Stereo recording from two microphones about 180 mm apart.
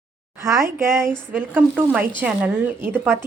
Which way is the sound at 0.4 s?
15° right (ahead or behind).